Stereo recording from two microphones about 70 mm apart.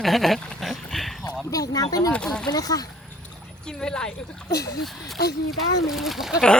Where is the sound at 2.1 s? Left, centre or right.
Centre.